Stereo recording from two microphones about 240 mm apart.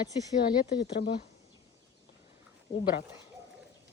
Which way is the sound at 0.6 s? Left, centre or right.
Left.